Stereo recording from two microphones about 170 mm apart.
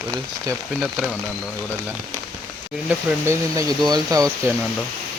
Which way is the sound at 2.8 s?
15° right (ahead or behind).